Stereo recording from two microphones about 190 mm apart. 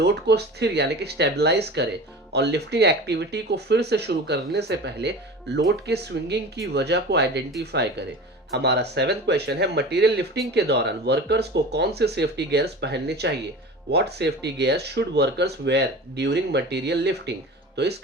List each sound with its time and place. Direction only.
0.0 s speech: 60° right (ahead or behind)